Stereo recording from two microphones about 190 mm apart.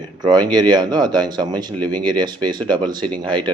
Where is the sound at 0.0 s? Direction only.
20° right (ahead or behind).